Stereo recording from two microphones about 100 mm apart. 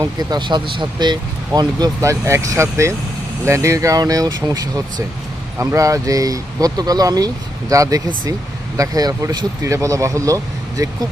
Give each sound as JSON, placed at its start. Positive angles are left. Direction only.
{"t": 0.0, "sound": "speech", "side_deg": -40}
{"t": 9.6, "sound": "speech", "side_deg": -30}